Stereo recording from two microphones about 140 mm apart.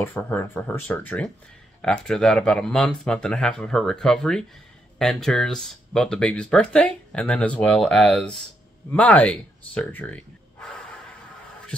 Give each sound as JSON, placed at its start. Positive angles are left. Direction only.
{"t": 0.0, "sound": "speech", "side_deg": 15}